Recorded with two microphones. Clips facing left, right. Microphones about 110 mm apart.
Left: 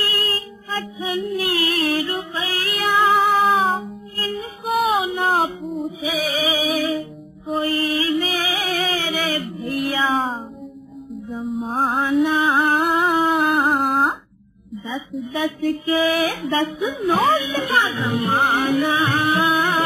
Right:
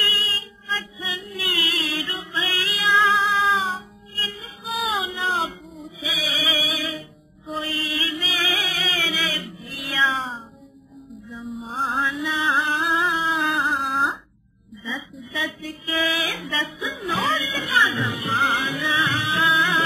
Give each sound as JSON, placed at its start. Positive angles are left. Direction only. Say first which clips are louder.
{"t": 0.2, "sound": "child singing", "louder": "left 7 dB", "side_deg": 50}
{"t": 2.6, "sound": "music", "louder": "left 3 dB", "side_deg": 50}
{"t": 5.1, "sound": "a sound", "louder": "left 6 dB", "side_deg": 50}
{"t": 6.1, "sound": "music", "louder": "left 5 dB", "side_deg": 50}
{"t": 11.5, "sound": "music", "louder": "left 5 dB", "side_deg": 50}
{"t": 12.5, "sound": "humming", "louder": "left 5 dB", "side_deg": 50}
{"t": 13.6, "sound": "a sound", "louder": "left 5 dB", "side_deg": 50}
{"t": 19.5, "sound": "music", "louder": "left 2 dB", "side_deg": 45}